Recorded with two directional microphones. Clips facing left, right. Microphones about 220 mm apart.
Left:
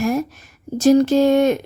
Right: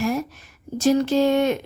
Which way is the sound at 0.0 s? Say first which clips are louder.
Left 4 dB; 45° left (ahead or behind).